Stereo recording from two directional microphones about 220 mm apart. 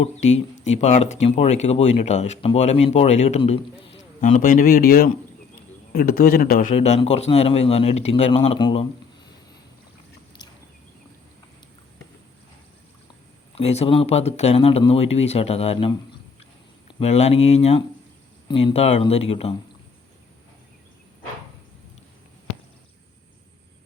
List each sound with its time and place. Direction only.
0.0 s speech: 30° left (ahead or behind)
4.2 s a man's voice: 35° left (ahead or behind)
13.6 s speech: 30° left (ahead or behind)